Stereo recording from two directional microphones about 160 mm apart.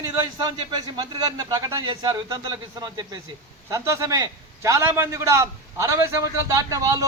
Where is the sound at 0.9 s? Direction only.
25° right (ahead or behind).